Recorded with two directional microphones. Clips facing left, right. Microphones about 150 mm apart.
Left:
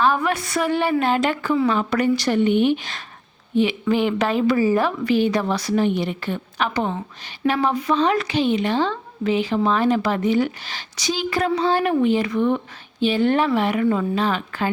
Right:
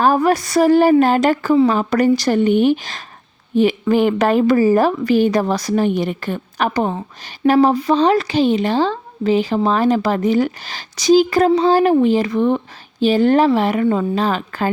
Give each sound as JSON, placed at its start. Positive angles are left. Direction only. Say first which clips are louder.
{"t": 0.0, "sound": "a woman's voice", "louder": "right 5 dB", "side_deg": -40}